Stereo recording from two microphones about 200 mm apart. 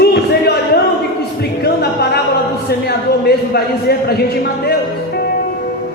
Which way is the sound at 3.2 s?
50° left (ahead or behind).